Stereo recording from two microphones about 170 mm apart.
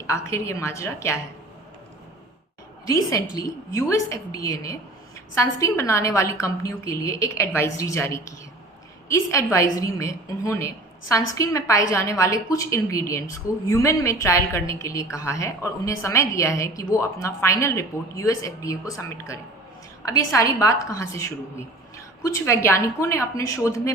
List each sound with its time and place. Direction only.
0.1 s a woman's voice: 15° left (ahead or behind)
2.8 s a woman's voice: 20° left (ahead or behind)